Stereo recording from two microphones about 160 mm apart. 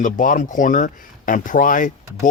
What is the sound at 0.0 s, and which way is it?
Speech, 55° left (ahead or behind).